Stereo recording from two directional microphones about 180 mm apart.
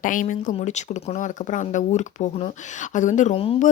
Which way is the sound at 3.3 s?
30° left (ahead or behind).